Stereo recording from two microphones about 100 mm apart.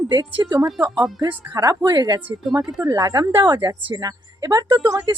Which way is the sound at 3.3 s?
50° right (ahead or behind).